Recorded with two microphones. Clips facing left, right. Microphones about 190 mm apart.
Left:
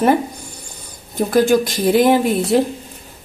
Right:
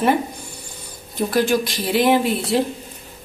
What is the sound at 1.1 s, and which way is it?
A woman's voice, 45° left (ahead or behind).